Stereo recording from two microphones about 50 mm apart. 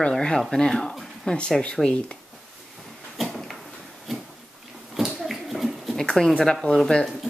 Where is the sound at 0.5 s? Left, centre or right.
Centre.